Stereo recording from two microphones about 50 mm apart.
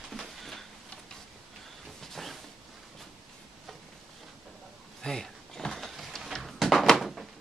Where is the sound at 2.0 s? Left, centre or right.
Centre.